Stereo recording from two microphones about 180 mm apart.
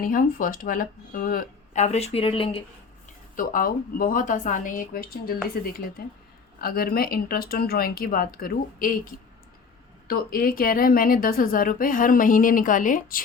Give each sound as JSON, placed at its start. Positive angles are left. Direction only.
{"t": 0.0, "sound": "a woman's voice", "side_deg": 50}
{"t": 3.3, "sound": "a woman's voice", "side_deg": 50}
{"t": 10.1, "sound": "a woman's voice", "side_deg": 55}